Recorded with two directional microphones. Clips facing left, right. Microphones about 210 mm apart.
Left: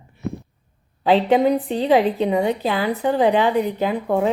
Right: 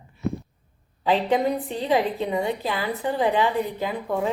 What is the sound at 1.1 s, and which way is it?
Speech, 90° left.